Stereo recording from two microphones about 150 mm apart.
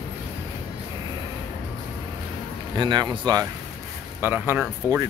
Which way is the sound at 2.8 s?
30° right (ahead or behind).